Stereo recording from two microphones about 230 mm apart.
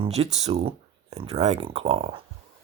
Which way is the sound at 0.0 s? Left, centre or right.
Right.